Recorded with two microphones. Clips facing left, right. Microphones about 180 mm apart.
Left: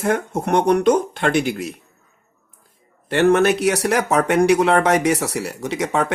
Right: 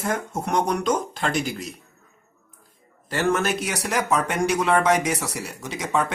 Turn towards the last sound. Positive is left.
turn(degrees=65)  # may be behind; listen again after turning